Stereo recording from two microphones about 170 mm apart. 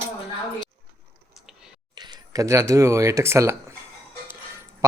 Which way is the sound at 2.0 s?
25° right (ahead or behind).